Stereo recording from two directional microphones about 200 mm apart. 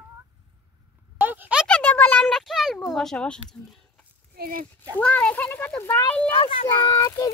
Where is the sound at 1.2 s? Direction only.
10° right (ahead or behind).